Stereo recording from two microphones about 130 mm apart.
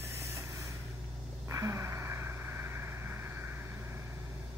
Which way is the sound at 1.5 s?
25° right (ahead or behind).